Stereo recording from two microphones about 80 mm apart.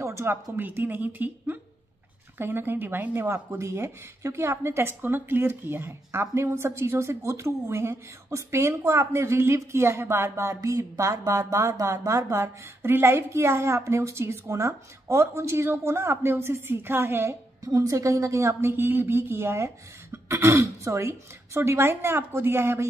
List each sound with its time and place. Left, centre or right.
0.0 s a woman's voice: right
17.6 s speech: right